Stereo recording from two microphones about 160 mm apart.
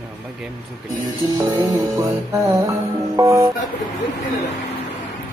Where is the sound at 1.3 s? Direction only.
25° right (ahead or behind).